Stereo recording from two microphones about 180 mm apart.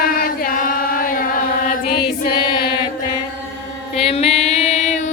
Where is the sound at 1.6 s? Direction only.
60° left (ahead or behind).